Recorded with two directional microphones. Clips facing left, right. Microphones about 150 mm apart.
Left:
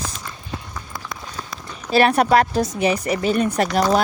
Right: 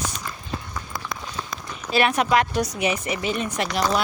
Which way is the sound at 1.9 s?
35° left (ahead or behind).